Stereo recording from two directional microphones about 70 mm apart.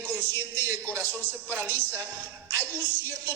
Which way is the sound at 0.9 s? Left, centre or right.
Right.